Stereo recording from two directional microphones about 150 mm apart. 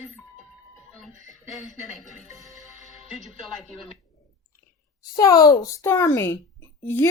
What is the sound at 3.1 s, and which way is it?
Speech, centre (ahead or behind).